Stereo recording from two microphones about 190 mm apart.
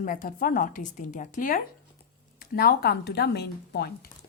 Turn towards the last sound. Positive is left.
turn(degrees=60)  # may be behind; listen again after turning